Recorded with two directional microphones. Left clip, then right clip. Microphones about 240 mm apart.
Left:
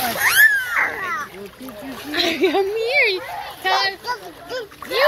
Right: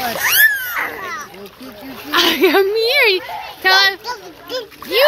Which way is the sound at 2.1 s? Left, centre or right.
Right.